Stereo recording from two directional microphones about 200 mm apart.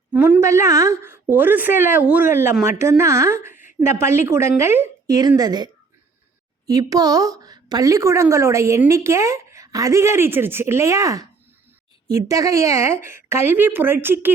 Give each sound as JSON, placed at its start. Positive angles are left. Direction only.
{"t": 0.1, "sound": "a woman's voice", "side_deg": -10}